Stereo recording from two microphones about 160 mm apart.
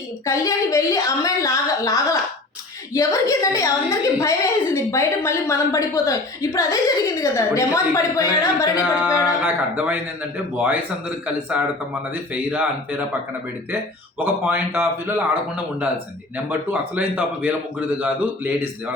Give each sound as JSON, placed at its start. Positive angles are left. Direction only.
{"t": 0.3, "sound": "a woman's voice", "side_deg": 20}
{"t": 9.4, "sound": "a man's voice", "side_deg": -10}
{"t": 14.2, "sound": "a man's voice", "side_deg": -15}
{"t": 16.5, "sound": "a man's voice", "side_deg": -10}